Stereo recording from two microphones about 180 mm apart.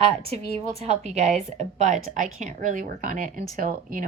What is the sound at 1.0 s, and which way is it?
A woman's voice, 40° right (ahead or behind).